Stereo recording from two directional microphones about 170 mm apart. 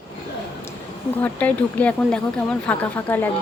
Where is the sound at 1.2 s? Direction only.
10° left (ahead or behind).